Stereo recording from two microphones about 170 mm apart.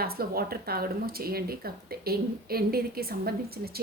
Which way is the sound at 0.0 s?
65° right (ahead or behind).